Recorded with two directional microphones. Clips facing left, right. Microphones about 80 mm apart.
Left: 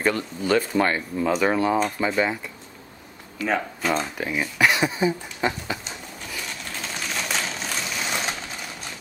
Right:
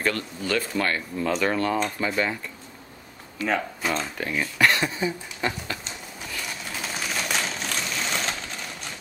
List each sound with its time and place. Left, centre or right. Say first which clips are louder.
0.0 s speech: left 3 dB; centre
3.9 s speech: left 3 dB; centre
6.6 s a sound: even; centre